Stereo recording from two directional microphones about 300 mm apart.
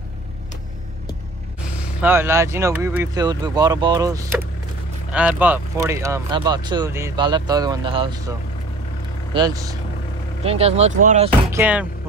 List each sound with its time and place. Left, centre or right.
2.0 s speech: centre
9.3 s speech: centre
11.5 s speech: centre